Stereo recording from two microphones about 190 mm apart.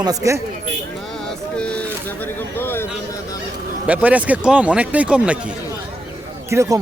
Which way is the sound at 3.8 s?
10° right (ahead or behind).